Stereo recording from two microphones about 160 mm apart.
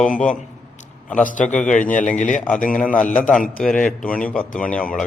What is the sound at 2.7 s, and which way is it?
A man's voice, 10° left (ahead or behind).